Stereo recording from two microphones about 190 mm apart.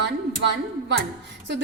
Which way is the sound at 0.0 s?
65° right (ahead or behind).